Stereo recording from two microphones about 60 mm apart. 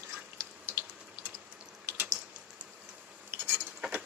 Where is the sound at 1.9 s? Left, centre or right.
Right.